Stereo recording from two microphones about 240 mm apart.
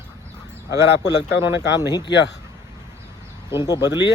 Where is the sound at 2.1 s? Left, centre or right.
Left.